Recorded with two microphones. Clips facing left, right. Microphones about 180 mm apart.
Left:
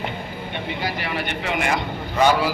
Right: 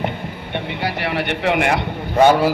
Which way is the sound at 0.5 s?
65° right (ahead or behind).